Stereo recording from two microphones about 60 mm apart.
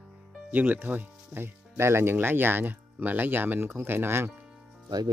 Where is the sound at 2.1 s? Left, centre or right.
Right.